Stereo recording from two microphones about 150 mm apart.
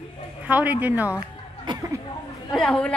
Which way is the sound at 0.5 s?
10° right (ahead or behind).